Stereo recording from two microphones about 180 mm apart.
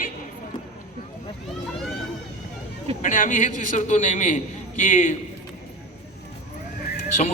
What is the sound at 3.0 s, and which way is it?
A man's voice, 45° left (ahead or behind).